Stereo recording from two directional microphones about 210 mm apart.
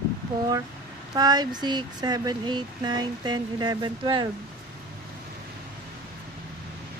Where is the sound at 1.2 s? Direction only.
20° right (ahead or behind).